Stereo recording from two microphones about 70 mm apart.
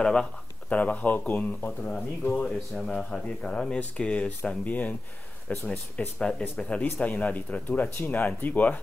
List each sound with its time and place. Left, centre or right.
0.0 s speech: centre
2.7 s speech: centre; by 8.7 s left